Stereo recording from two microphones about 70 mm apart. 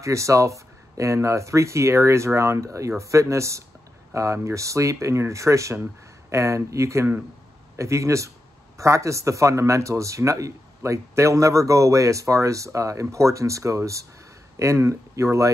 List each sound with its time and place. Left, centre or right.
0.0 s a man's voice: right